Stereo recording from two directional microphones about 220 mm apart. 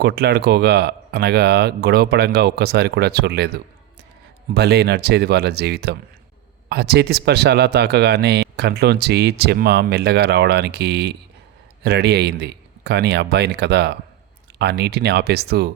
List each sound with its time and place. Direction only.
0.0 s speech: 45° right (ahead or behind)
4.5 s speech: 50° right (ahead or behind)